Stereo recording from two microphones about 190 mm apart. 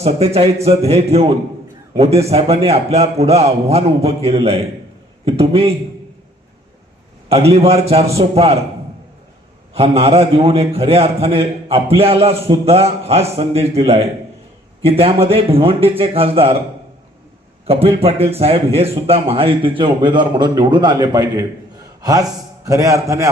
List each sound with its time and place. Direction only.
0.0 s a man's voice: 30° right (ahead or behind)
7.3 s a man's voice: 30° right (ahead or behind)
9.7 s a man's voice: 30° right (ahead or behind)
17.7 s a man's voice: 30° right (ahead or behind)